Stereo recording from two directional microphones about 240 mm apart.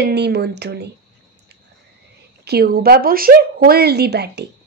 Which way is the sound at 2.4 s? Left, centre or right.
Right.